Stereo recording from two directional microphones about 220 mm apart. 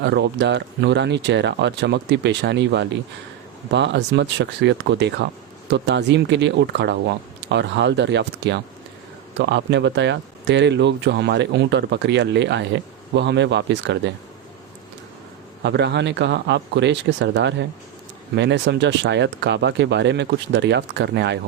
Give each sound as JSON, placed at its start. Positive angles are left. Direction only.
{"t": 0.0, "sound": "speech", "side_deg": -50}
{"t": 15.6, "sound": "speech", "side_deg": -50}